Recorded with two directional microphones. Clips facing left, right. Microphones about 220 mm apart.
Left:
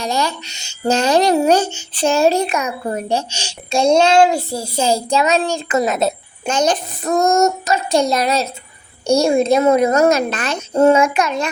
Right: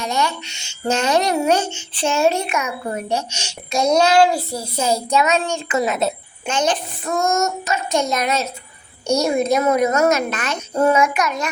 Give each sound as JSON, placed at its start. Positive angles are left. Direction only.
{"t": 0.0, "sound": "a woman's voice", "side_deg": 35}